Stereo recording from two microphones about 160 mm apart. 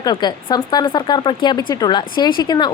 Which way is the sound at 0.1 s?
25° left (ahead or behind).